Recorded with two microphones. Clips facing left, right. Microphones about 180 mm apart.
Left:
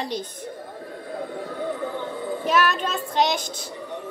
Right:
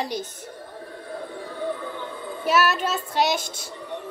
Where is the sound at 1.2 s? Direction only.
50° left (ahead or behind).